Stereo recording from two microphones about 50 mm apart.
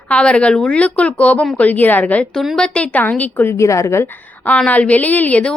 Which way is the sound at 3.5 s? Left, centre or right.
Left.